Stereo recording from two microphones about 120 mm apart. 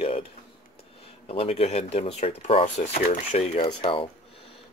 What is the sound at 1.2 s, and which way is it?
Speech, 55° left (ahead or behind).